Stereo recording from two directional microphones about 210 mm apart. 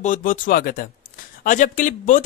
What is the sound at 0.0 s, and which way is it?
Speech, 40° left (ahead or behind).